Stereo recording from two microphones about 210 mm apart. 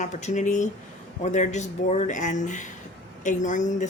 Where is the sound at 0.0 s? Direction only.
35° left (ahead or behind).